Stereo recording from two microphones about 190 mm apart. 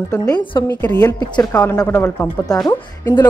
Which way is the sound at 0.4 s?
25° left (ahead or behind).